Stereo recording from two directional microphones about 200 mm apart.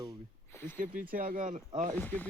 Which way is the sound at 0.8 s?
45° right (ahead or behind).